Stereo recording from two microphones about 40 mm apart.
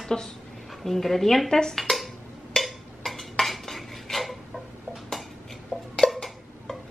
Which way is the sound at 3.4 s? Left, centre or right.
Centre.